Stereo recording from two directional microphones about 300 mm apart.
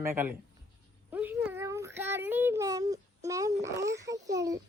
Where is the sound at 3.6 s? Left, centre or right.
Centre.